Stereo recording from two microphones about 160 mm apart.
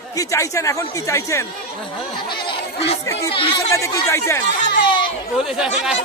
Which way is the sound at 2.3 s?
35° left (ahead or behind).